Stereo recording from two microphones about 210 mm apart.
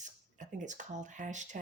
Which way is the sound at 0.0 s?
35° right (ahead or behind).